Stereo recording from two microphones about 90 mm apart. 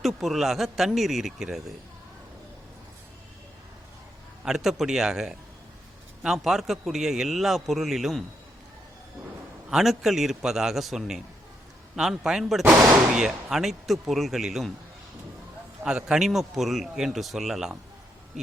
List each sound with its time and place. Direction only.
0.0 s a man's voice: centre (ahead or behind)
4.4 s a man's voice: 5° right (ahead or behind)
9.6 s a man's voice: 5° right (ahead or behind)
15.8 s a man's voice: 10° right (ahead or behind)